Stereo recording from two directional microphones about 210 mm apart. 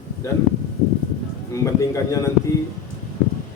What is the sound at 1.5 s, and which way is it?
Speech, 15° left (ahead or behind).